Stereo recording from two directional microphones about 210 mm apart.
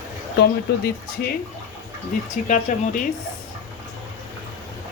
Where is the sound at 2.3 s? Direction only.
35° left (ahead or behind).